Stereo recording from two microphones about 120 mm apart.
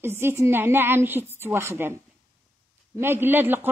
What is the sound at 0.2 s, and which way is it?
A woman's voice, 20° right (ahead or behind).